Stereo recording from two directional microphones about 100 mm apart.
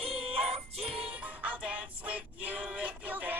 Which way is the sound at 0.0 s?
75° right (ahead or behind).